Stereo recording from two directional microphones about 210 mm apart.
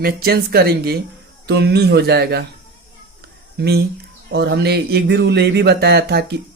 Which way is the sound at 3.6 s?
50° right (ahead or behind).